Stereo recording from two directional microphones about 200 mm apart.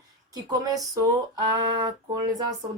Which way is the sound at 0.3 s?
20° right (ahead or behind).